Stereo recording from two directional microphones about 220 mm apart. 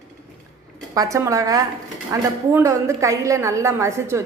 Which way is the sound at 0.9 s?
15° right (ahead or behind).